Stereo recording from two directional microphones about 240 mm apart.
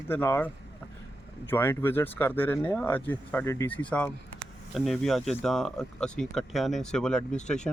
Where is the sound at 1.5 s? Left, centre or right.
Centre.